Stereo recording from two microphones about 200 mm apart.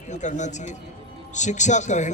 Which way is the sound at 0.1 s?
35° left (ahead or behind).